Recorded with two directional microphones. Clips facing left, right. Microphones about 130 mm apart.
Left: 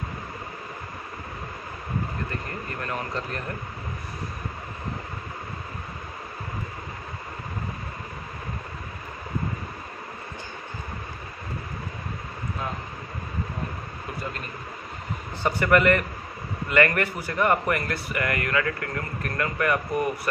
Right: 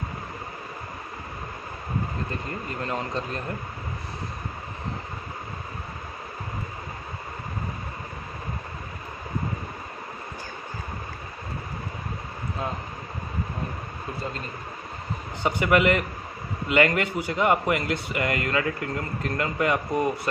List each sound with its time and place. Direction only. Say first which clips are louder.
2.4 s a man's voice: right 2 dB; 20° right (ahead or behind)
15.4 s a man's voice: left 1 dB; 15° right (ahead or behind)